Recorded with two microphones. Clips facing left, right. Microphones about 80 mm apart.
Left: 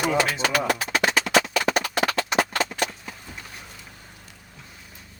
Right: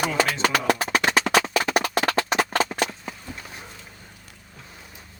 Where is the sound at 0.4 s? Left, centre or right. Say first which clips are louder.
Right 2 dB; right.